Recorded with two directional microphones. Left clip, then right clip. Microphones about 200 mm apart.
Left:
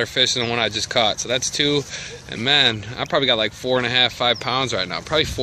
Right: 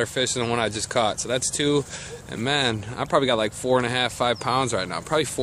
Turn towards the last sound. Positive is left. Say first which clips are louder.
# left 3 dB
turn(degrees=0)  # may be behind; listen again after turning